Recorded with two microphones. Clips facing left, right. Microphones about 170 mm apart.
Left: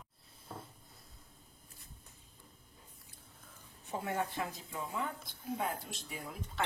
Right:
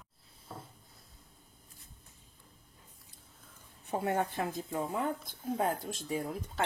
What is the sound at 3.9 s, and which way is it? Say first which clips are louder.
Speech: right 5 dB; 55° right (ahead or behind).